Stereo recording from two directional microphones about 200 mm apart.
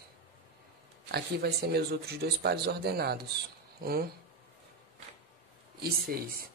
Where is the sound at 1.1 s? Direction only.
50° right (ahead or behind).